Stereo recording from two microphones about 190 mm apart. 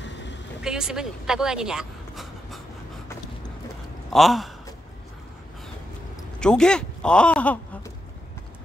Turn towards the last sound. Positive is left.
turn(degrees=5)  # may be behind; listen again after turning